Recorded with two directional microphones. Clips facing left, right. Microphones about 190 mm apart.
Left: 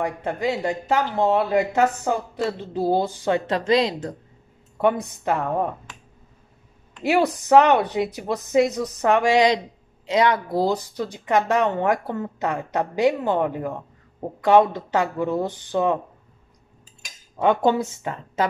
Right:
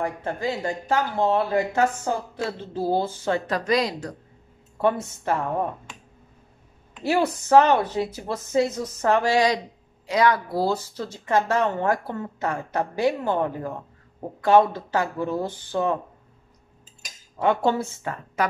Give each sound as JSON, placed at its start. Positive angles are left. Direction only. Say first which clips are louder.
{"t": 0.0, "sound": "speech", "louder": "left 2 dB", "side_deg": 20}
{"t": 4.8, "sound": "speech", "louder": "left 2 dB", "side_deg": 15}
{"t": 7.0, "sound": "speech", "louder": "left 2 dB", "side_deg": 15}
{"t": 17.4, "sound": "speech", "louder": "left 3 dB", "side_deg": 20}